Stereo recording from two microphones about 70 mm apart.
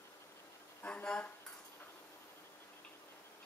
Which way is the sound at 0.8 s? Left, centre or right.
Centre.